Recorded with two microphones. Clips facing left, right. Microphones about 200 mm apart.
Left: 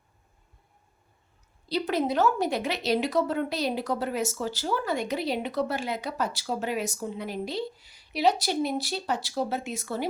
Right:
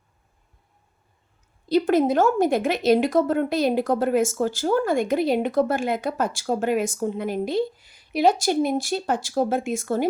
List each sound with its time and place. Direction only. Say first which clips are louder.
1.7 s a woman's voice: right 7 dB; 50° right (ahead or behind)